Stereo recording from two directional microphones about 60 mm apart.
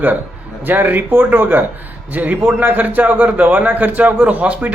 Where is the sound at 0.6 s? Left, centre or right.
Right.